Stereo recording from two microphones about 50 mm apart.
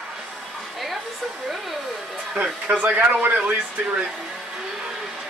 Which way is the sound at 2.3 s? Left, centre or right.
Right.